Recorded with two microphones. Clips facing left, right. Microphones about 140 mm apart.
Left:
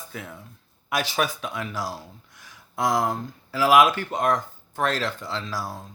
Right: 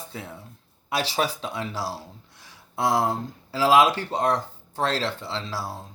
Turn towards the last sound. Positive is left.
turn(degrees=-30)  # may be behind; listen again after turning